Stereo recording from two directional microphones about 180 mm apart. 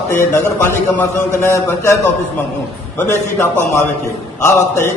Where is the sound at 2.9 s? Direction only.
15° left (ahead or behind).